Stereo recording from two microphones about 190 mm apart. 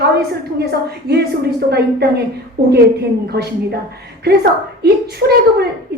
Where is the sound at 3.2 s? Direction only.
55° right (ahead or behind).